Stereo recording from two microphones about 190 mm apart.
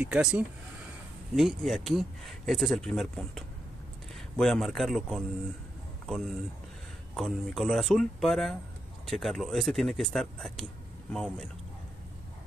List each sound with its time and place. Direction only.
0.0 s speech: 5° right (ahead or behind)